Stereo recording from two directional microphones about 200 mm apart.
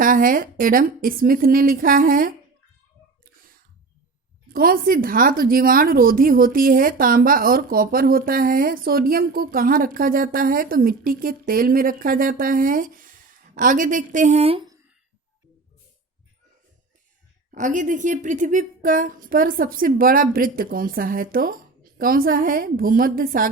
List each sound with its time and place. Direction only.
0.0 s speech: 45° right (ahead or behind)
4.5 s speech: 45° right (ahead or behind)
17.5 s speech: 40° right (ahead or behind)